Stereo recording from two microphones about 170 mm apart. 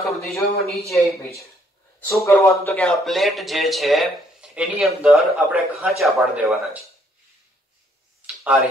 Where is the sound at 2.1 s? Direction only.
15° left (ahead or behind).